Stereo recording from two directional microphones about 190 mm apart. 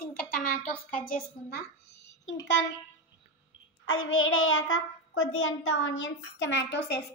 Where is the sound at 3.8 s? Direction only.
90° left.